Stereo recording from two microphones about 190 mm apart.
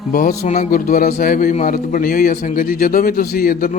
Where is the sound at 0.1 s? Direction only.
45° left (ahead or behind).